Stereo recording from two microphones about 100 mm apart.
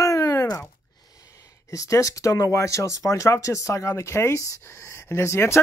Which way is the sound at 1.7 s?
30° left (ahead or behind).